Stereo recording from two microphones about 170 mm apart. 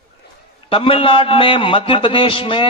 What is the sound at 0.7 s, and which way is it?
A man's voice, 30° left (ahead or behind).